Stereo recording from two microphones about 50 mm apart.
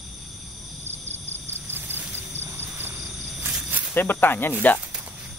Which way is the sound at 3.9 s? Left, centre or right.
Left.